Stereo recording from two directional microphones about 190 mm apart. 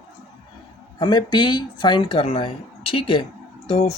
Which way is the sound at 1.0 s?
20° left (ahead or behind).